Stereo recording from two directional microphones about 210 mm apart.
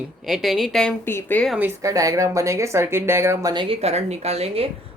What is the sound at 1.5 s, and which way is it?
Speech, 10° right (ahead or behind).